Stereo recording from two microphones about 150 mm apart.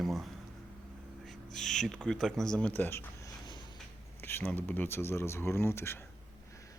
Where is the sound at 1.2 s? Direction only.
Centre (ahead or behind).